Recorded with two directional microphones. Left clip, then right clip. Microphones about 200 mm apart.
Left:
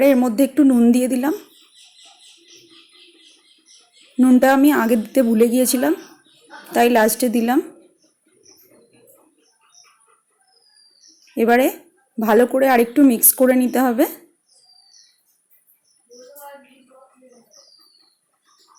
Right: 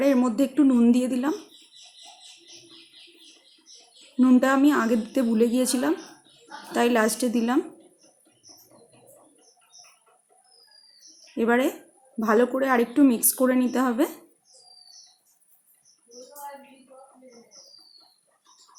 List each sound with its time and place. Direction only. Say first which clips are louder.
0.0 s a woman's voice: left 7 dB; 20° left (ahead or behind)
4.2 s a woman's voice: left 6 dB; 20° left (ahead or behind)
11.3 s a woman's voice: left 7 dB; 20° left (ahead or behind)